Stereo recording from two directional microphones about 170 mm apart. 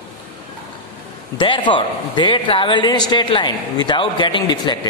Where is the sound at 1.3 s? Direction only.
30° left (ahead or behind).